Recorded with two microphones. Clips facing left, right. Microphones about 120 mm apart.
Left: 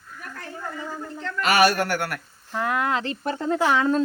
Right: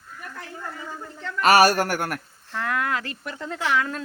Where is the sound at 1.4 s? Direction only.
40° right (ahead or behind).